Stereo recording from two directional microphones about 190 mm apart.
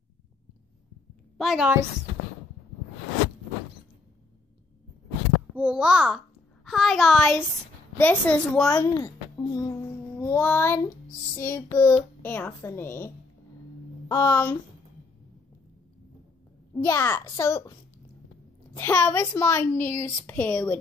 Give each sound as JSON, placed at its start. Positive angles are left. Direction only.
{"t": 1.4, "sound": "a woman's voice", "side_deg": -5}
{"t": 5.6, "sound": "a child's voice", "side_deg": -5}
{"t": 8.7, "sound": "a child's voice", "side_deg": 20}
{"t": 16.8, "sound": "a woman's voice", "side_deg": 10}